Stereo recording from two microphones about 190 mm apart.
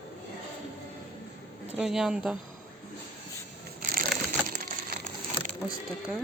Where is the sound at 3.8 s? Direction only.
50° right (ahead or behind).